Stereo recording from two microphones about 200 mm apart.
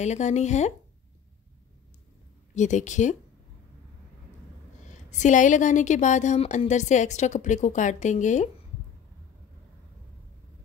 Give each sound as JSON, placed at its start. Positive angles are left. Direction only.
{"t": 0.0, "sound": "a woman's voice", "side_deg": 35}
{"t": 2.5, "sound": "a woman's voice", "side_deg": 35}
{"t": 4.8, "sound": "a woman's voice", "side_deg": 35}